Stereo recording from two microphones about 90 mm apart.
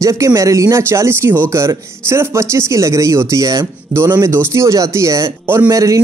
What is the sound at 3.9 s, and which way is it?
Speech, 30° right (ahead or behind).